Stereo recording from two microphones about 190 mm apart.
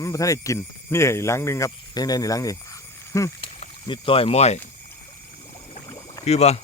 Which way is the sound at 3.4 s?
30° left (ahead or behind).